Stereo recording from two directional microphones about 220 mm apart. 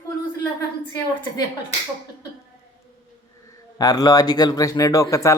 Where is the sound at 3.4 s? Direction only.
15° left (ahead or behind).